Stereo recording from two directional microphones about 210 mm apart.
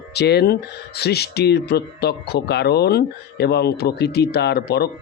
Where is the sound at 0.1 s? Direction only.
50° left (ahead or behind).